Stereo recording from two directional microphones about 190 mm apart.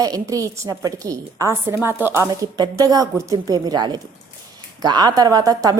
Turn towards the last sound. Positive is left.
turn(degrees=-20)  # may be behind; listen again after turning